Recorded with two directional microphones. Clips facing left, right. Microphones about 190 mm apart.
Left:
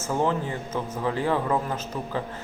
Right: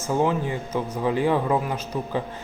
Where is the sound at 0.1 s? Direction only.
10° right (ahead or behind).